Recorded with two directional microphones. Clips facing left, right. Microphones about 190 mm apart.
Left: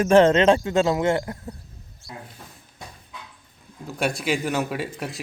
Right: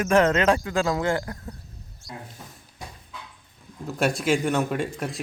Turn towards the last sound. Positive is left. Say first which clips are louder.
# right 1 dB
turn(degrees=5)  # may be behind; listen again after turning